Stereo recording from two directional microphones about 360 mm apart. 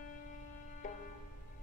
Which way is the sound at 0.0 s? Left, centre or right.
Left.